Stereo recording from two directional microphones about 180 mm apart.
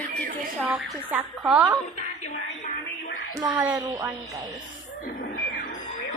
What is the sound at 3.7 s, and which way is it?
Speech, 20° right (ahead or behind).